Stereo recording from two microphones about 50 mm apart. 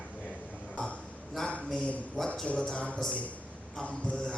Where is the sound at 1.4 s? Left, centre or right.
Centre.